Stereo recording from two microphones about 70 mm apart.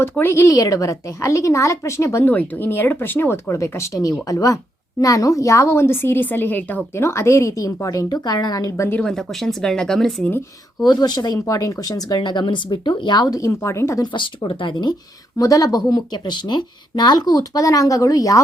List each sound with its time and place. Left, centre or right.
0.0 s a woman's voice: left
0.4 s speech: left
2.2 s a woman's voice: left
6.9 s speech: left
9.0 s speech: centre
10.8 s speech: left
13.4 s speech: left
15.4 s speech: left
15.9 s speech: left